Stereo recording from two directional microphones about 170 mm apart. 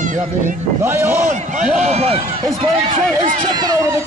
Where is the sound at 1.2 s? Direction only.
45° right (ahead or behind).